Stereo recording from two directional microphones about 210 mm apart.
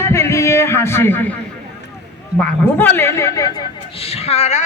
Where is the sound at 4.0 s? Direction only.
30° left (ahead or behind).